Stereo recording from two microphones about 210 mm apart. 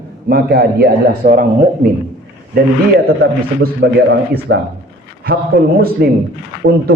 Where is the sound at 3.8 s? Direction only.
55° right (ahead or behind).